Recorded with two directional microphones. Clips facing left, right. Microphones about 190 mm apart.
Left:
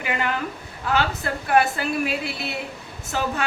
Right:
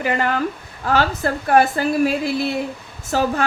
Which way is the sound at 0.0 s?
40° right (ahead or behind).